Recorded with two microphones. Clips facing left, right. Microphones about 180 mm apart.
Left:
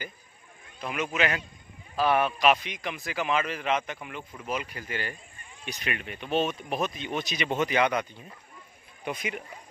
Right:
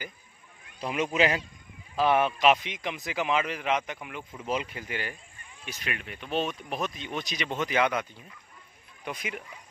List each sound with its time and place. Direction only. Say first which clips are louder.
0.7 s a man's voice: right 3 dB; 30° right (ahead or behind); by 4.5 s 10° right (ahead or behind)
4.5 s speech: right 2 dB; 25° right (ahead or behind)
5.7 s speech: left 2 dB; centre (ahead or behind)